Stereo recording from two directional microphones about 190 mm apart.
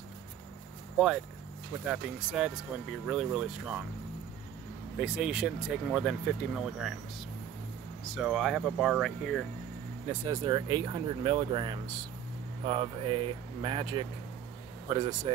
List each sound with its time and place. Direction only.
0.9 s speech: 5° right (ahead or behind)
4.9 s speech: 5° right (ahead or behind)
8.0 s speech: centre (ahead or behind)
10.0 s speech: 15° right (ahead or behind)